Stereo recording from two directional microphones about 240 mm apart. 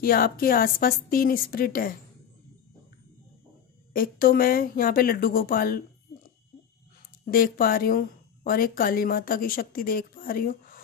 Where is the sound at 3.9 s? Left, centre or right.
Left.